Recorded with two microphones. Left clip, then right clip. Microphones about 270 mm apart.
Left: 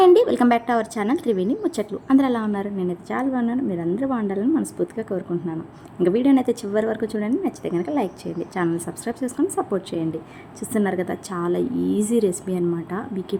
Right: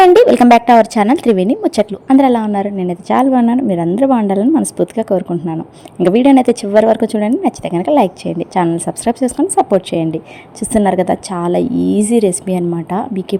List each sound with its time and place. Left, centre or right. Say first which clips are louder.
0.0 s a woman's voice: right 8 dB; right